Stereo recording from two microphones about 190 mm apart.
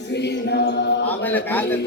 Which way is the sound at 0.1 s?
60° left (ahead or behind).